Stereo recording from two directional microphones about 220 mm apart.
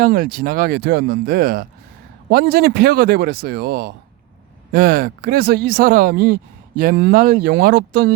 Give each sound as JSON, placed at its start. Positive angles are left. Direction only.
{"t": 0.0, "sound": "speech", "side_deg": -40}